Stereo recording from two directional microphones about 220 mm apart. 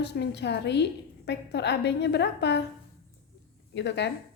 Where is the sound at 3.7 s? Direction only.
50° left (ahead or behind).